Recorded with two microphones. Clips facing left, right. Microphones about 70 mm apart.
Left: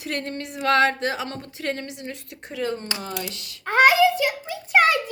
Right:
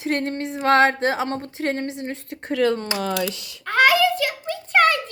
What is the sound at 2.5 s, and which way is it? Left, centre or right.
Speech, right.